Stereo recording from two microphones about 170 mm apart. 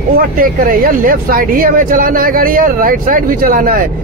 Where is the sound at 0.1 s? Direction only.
60° right (ahead or behind).